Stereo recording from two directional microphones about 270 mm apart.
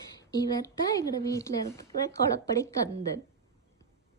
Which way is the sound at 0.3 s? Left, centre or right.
Centre.